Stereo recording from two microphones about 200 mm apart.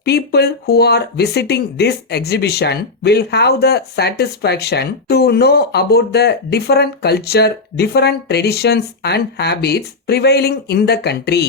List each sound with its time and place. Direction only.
0.0 s speech: 55° left (ahead or behind)